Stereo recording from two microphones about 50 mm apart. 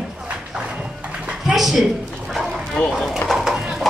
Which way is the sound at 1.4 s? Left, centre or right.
Centre.